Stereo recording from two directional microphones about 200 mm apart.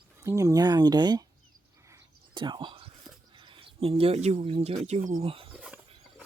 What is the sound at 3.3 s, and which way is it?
Speech, 25° right (ahead or behind).